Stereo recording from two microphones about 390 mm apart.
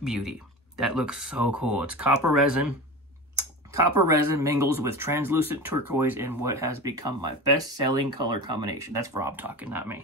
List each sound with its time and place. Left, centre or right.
0.0 s speech: centre
7.6 s speech: right
9.2 s speech: centre